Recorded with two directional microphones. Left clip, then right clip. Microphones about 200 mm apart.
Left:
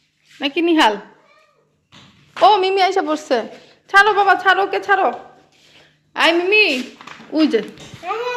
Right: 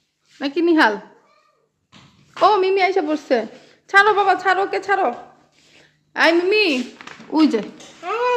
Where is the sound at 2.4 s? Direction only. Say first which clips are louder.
Left 2 dB; 25° right (ahead or behind).